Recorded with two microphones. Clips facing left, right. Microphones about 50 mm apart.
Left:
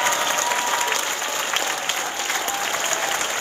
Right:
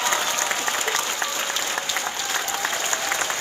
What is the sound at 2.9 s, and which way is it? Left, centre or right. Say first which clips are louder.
Applause: left 1 dB; left.